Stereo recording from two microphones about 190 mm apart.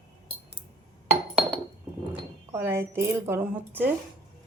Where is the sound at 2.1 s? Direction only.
10° right (ahead or behind).